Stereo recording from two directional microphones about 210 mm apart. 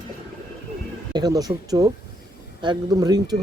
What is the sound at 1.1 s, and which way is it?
Speech, 20° right (ahead or behind).